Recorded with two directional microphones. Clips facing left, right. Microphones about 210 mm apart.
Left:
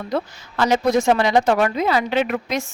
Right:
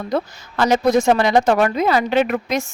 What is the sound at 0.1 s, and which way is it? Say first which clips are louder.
A woman's voice: right 2 dB; 45° right (ahead or behind).